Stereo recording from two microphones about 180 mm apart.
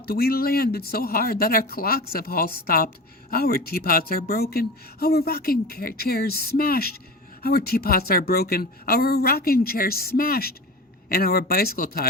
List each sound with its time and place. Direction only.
0.0 s speech: 60° left (ahead or behind)